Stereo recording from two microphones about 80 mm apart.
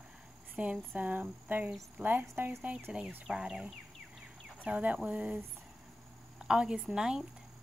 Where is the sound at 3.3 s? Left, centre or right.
Centre.